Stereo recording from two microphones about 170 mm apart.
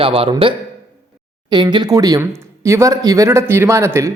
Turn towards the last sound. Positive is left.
turn(degrees=-15)  # may be behind; listen again after turning